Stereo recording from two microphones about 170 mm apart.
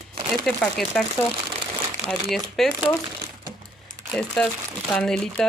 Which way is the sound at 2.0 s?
Centre (ahead or behind).